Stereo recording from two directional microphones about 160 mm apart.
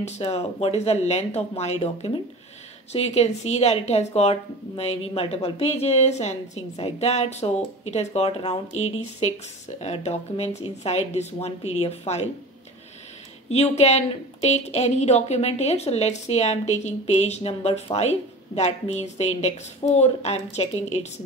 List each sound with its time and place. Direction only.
0.0 s speech: 40° left (ahead or behind)
13.5 s a woman's voice: 45° left (ahead or behind)